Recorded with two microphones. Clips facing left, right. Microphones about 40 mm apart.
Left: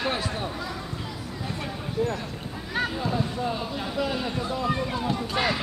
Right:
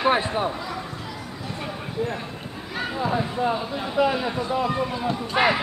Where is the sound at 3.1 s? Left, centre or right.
Right.